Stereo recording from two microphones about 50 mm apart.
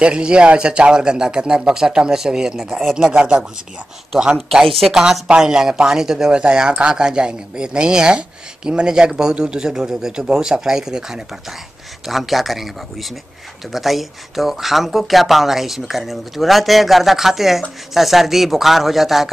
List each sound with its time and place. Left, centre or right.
0.0 s speech: right
4.4 s speech: centre